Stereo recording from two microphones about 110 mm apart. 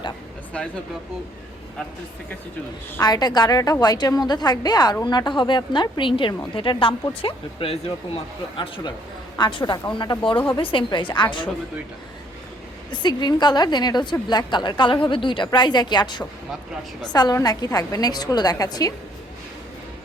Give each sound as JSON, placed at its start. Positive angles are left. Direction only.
{"t": 3.0, "sound": "a woman's voice", "side_deg": 40}
{"t": 12.9, "sound": "a woman's voice", "side_deg": 40}